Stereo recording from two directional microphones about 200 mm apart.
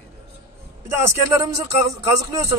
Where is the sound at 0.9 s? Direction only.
15° right (ahead or behind).